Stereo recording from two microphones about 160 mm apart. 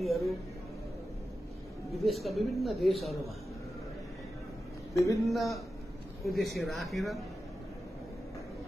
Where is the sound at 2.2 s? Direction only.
Centre (ahead or behind).